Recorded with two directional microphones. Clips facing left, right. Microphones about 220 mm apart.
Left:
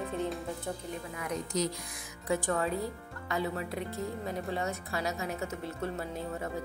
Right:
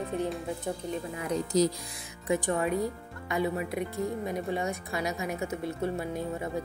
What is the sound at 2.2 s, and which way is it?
A woman's voice, 15° right (ahead or behind).